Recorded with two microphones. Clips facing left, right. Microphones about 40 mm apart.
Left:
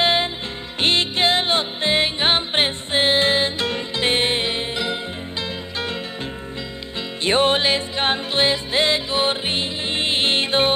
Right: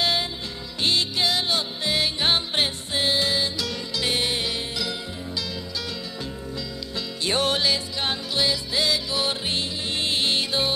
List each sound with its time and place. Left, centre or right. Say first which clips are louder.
0.0 s music: left 5 dB; left
7.2 s music: left 6 dB; left